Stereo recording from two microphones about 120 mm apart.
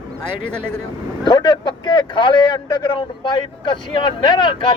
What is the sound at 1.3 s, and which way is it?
Speech, 40° left (ahead or behind).